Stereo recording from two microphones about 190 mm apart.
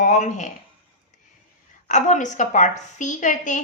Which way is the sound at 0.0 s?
40° left (ahead or behind).